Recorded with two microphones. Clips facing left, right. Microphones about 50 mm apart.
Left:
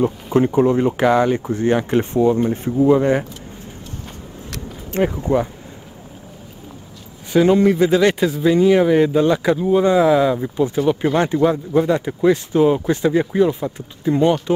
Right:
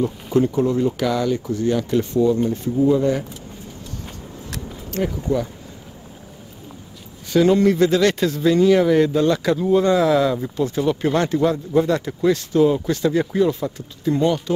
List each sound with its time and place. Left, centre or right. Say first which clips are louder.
0.0 s speech: left 2 dB; left
4.9 s speech: left 4 dB; left
7.3 s speech: left 2 dB; centre